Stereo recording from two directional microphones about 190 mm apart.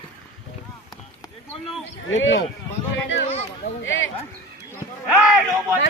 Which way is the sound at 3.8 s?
80° left.